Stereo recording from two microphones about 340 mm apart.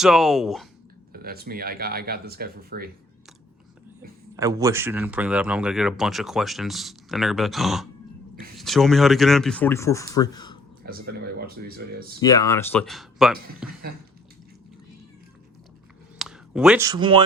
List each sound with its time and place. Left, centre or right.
0.0 s speech: centre
1.1 s speech: right
4.4 s speech: centre
10.8 s speech: right
12.2 s speech: centre
16.1 s speech: centre